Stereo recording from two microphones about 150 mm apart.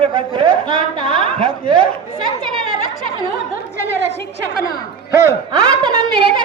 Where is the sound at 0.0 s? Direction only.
35° right (ahead or behind).